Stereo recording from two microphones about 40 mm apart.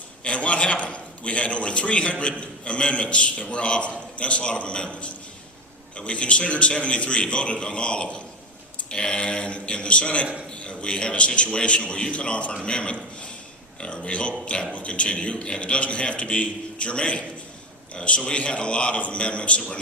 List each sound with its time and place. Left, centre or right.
0.3 s a man's voice: left